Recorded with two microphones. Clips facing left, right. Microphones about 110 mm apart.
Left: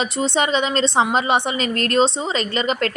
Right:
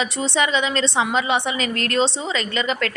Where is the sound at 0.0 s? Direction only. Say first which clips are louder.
Left 2 dB; 25° left (ahead or behind).